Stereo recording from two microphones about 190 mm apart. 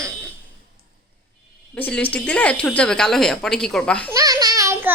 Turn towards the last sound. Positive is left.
turn(degrees=-15)  # may be behind; listen again after turning